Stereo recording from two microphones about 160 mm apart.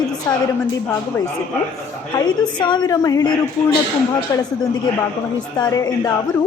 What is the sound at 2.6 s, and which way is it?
Speech, 30° left (ahead or behind).